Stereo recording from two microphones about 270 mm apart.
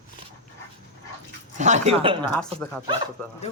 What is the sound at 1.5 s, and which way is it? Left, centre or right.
Speech, right.